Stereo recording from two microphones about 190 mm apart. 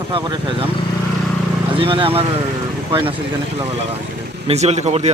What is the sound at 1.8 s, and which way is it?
Speech, 25° right (ahead or behind).